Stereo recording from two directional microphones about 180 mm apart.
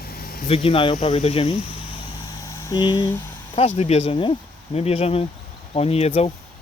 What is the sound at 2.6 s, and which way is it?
Speech, 25° left (ahead or behind).